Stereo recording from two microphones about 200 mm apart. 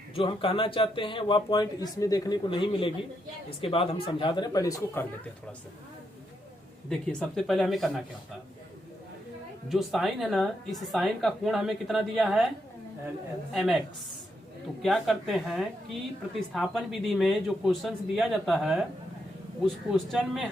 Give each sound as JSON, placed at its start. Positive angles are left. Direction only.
{"t": 0.2, "sound": "speech", "side_deg": 25}
{"t": 7.1, "sound": "speech", "side_deg": 5}
{"t": 9.6, "sound": "speech", "side_deg": 0}
{"t": 13.5, "sound": "speech", "side_deg": 0}